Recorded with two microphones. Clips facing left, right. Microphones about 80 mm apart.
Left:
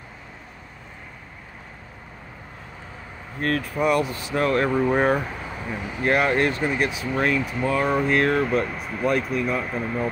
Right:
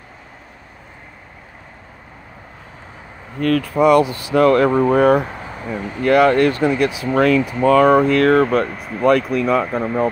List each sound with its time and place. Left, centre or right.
3.4 s speech: right
3.8 s speech: right
6.0 s speech: right
7.0 s speech: right